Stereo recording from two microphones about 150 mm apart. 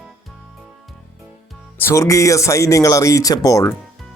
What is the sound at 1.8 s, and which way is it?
A man's voice, 20° left (ahead or behind).